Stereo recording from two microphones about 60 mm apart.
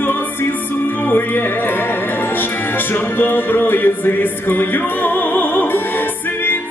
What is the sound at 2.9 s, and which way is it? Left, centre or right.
Music, left.